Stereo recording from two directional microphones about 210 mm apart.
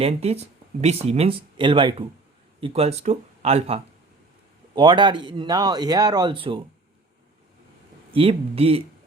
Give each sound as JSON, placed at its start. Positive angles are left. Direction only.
{"t": 0.0, "sound": "speech", "side_deg": -30}
{"t": 8.1, "sound": "speech", "side_deg": -25}